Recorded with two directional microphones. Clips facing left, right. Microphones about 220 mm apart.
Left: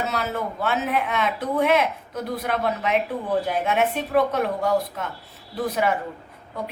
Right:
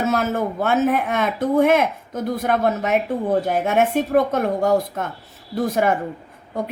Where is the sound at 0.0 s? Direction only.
45° right (ahead or behind).